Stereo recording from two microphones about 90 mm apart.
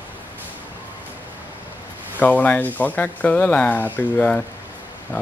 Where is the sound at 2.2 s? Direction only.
15° left (ahead or behind).